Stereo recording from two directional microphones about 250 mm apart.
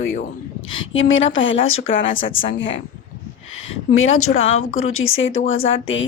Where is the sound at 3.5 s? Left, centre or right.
Left.